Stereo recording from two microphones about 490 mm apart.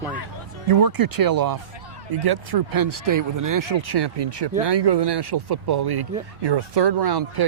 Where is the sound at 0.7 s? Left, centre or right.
Right.